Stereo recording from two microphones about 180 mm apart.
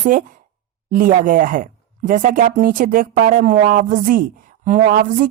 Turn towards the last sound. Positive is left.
turn(degrees=-50)  # may be behind; listen again after turning